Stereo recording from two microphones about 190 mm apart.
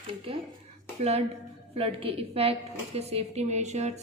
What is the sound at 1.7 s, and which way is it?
A woman's voice, 30° right (ahead or behind).